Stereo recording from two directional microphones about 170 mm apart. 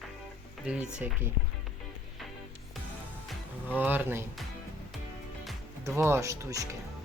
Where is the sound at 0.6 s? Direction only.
5° right (ahead or behind).